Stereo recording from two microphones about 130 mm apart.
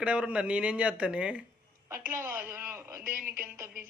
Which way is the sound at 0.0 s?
10° right (ahead or behind).